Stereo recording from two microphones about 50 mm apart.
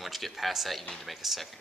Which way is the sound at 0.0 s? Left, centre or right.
Centre.